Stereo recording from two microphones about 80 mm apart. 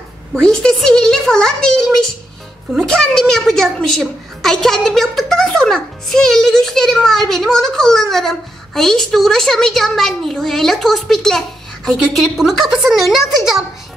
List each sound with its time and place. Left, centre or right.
0.3 s a woman's voice: centre